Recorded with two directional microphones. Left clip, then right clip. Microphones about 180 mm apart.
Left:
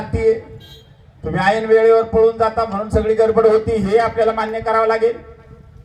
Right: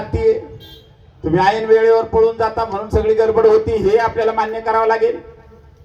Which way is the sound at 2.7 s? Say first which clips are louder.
Right 1 dB; 35° right (ahead or behind).